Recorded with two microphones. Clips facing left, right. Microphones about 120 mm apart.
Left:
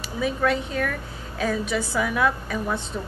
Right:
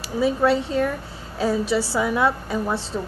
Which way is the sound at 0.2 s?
30° right (ahead or behind).